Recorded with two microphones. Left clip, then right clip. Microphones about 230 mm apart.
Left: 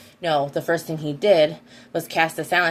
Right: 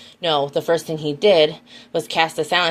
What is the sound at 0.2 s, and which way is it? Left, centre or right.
Speech, right.